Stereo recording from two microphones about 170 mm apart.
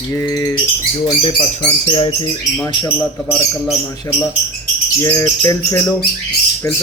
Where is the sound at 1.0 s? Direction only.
25° left (ahead or behind).